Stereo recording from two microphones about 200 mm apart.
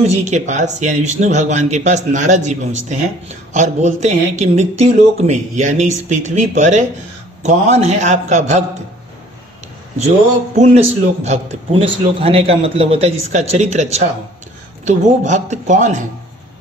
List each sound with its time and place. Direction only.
0.0 s a man's voice: 35° right (ahead or behind)
3.5 s a man's voice: 35° right (ahead or behind)
10.6 s a man's voice: 30° right (ahead or behind)